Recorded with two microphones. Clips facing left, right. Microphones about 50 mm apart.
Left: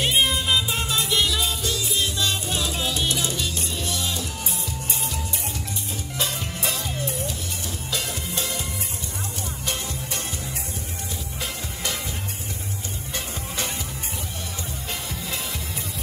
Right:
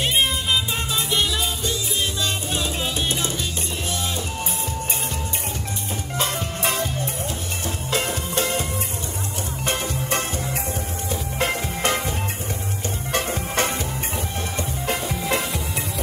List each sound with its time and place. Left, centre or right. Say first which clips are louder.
0.0 s music: even; centre
2.2 s music: right 1 dB; right
6.1 s music: right 4 dB; right
9.7 s music: right 7 dB; right
11.3 s music: right 11 dB; right
13.1 s music: right 9 dB; right
14.9 s music: right 9 dB; right